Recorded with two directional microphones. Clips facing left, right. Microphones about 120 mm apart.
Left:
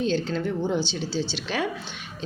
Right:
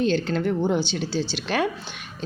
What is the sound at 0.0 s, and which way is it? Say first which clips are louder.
A woman's voice: right 3 dB; 65° right (ahead or behind).